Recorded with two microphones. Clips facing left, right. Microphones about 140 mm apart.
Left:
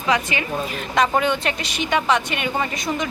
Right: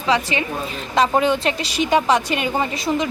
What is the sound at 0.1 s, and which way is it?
A woman's voice, 30° right (ahead or behind).